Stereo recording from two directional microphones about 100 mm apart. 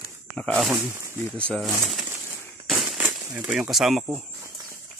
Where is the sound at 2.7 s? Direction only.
Centre (ahead or behind).